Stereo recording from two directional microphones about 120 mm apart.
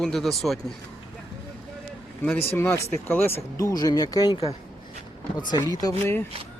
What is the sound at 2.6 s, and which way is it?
Speech, 20° left (ahead or behind).